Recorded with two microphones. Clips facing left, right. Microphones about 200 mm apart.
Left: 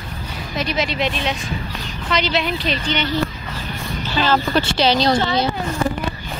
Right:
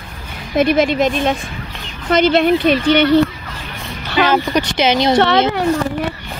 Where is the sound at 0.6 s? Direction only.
55° right (ahead or behind).